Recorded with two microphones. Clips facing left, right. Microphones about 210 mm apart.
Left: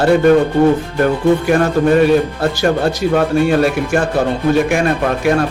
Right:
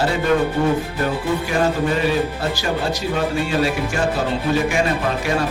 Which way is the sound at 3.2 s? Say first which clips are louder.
Left 7 dB; 55° left (ahead or behind).